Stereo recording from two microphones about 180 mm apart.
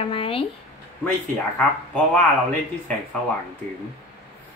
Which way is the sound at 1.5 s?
5° left (ahead or behind).